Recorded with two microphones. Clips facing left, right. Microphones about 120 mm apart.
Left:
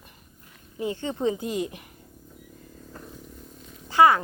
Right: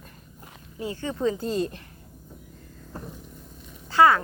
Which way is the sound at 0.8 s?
20° left (ahead or behind).